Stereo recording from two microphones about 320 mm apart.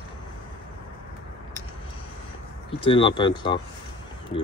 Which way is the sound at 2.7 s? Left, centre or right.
Centre.